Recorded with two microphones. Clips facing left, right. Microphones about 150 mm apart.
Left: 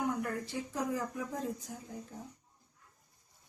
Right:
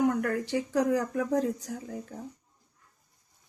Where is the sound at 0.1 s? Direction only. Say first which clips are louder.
Right 8 dB; 80° right.